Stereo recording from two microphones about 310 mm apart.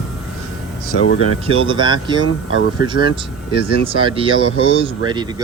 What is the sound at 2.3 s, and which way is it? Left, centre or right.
Speech, left.